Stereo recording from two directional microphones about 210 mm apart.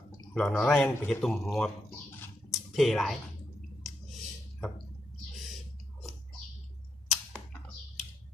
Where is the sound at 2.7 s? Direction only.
Centre (ahead or behind).